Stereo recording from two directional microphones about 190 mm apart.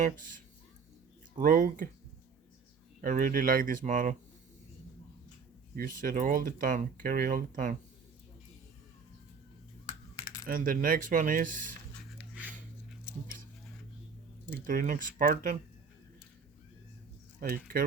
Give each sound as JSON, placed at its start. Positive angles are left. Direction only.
{"t": 0.0, "sound": "speech", "side_deg": -45}
{"t": 3.0, "sound": "speech", "side_deg": -45}
{"t": 5.7, "sound": "speech", "side_deg": -45}
{"t": 10.4, "sound": "speech", "side_deg": -45}
{"t": 14.7, "sound": "speech", "side_deg": -45}
{"t": 17.5, "sound": "speech", "side_deg": -50}